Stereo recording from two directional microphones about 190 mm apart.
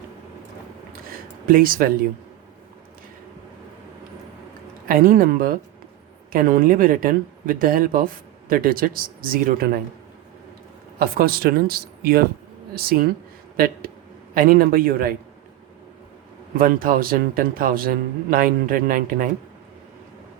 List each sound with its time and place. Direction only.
1.5 s a man's voice: 50° right (ahead or behind)
4.9 s a man's voice: 50° right (ahead or behind)
11.0 s a man's voice: 50° right (ahead or behind)
14.3 s a man's voice: 50° right (ahead or behind)
16.6 s a man's voice: 50° right (ahead or behind)